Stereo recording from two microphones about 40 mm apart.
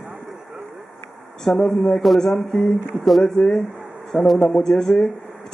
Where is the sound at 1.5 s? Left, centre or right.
Left.